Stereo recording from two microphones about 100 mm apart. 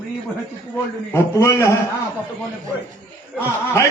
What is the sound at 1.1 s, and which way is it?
Speech, 30° left (ahead or behind).